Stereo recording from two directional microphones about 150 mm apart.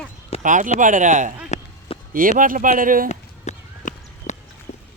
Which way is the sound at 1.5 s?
50° left (ahead or behind).